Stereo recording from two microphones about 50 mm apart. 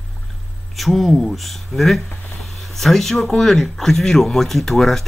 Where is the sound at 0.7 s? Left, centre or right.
Centre.